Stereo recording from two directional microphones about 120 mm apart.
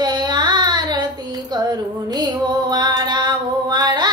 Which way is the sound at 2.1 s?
35° right (ahead or behind).